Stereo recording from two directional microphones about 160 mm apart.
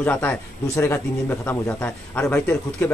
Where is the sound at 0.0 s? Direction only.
10° left (ahead or behind).